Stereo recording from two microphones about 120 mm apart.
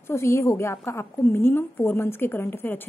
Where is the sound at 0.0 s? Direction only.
25° left (ahead or behind).